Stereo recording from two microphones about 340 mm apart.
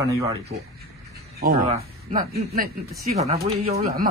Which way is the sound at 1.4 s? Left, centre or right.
Right.